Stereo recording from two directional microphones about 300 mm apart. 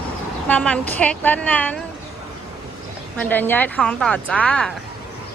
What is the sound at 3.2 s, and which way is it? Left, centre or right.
Speech, centre.